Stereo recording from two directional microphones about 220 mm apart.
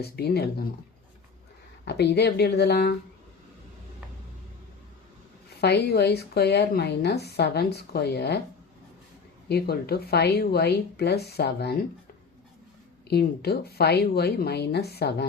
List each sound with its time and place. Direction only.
0.0 s a woman's voice: 45° left (ahead or behind)
1.8 s a woman's voice: 50° left (ahead or behind)
5.5 s a woman's voice: 45° left (ahead or behind)
9.5 s a woman's voice: 45° left (ahead or behind)
13.1 s a woman's voice: 45° left (ahead or behind)